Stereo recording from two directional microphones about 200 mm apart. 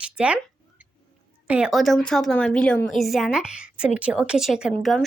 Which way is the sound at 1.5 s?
5° right (ahead or behind).